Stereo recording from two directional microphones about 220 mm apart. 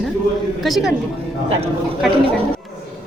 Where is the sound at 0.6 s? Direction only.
Centre (ahead or behind).